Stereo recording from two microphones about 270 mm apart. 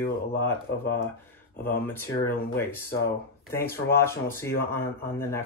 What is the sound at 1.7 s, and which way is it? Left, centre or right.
Speech, centre.